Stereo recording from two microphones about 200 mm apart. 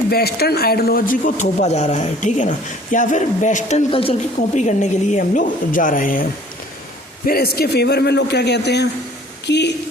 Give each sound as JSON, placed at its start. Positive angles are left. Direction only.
{"t": 0.1, "sound": "speech", "side_deg": 50}
{"t": 7.3, "sound": "speech", "side_deg": 50}